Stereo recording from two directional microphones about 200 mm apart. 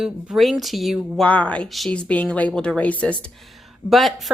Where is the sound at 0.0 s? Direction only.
Centre (ahead or behind).